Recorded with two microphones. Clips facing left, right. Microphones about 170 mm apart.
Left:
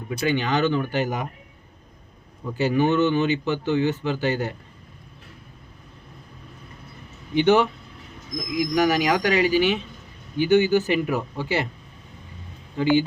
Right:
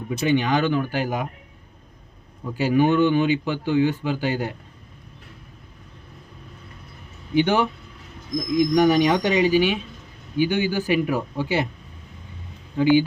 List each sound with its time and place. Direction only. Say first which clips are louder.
0.1 s speech: right 2 dB; 15° right (ahead or behind)
2.6 s speech: right 2 dB; 10° right (ahead or behind)
7.3 s speech: left 2 dB; 10° right (ahead or behind)
8.4 s speech: right 4 dB; 30° right (ahead or behind)
12.8 s speech: right 3 dB; 10° right (ahead or behind)